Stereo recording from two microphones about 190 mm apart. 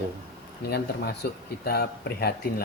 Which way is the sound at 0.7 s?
55° left (ahead or behind).